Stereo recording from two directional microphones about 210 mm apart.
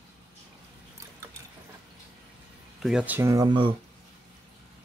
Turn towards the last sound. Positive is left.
turn(degrees=-20)  # may be behind; listen again after turning